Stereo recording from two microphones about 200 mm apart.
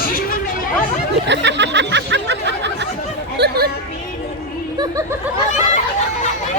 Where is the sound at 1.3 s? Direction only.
60° right (ahead or behind).